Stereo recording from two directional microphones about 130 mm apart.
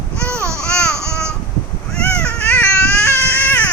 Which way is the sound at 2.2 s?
10° left (ahead or behind).